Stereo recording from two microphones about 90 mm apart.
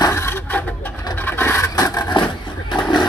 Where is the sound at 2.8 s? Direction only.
55° left (ahead or behind).